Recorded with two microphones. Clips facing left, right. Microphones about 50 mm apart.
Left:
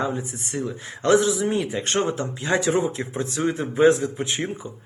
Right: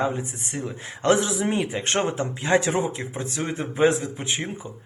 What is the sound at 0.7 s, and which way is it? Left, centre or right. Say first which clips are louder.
Speech: left 2 dB; right.